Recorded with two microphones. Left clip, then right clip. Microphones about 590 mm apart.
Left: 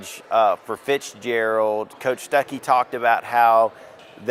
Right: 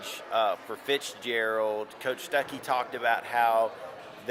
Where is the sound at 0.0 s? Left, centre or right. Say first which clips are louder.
Left 9 dB; left.